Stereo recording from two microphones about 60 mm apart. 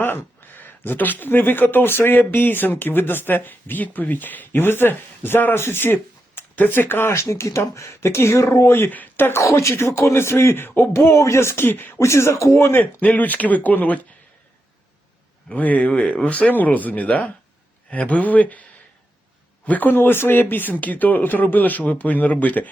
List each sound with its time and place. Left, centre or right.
0.0 s speech: left
8.9 s speech: left
9.4 s speech: left
11.9 s speech: left
12.8 s speech: left
15.4 s speech: left
15.9 s speech: centre